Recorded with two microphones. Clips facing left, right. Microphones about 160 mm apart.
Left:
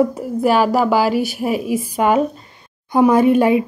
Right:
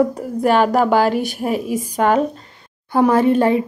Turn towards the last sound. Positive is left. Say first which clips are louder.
# left 2 dB
turn(degrees=10)  # may be behind; listen again after turning